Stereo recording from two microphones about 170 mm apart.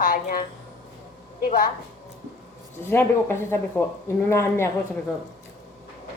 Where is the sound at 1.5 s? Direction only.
55° left (ahead or behind).